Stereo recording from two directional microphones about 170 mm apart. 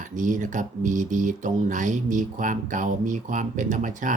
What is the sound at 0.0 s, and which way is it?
Speech, 50° right (ahead or behind).